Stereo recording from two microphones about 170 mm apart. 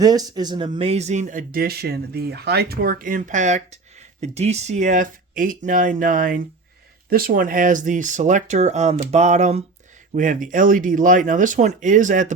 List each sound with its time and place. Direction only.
0.0 s speech: 20° right (ahead or behind); by 12.3 s 50° right (ahead or behind)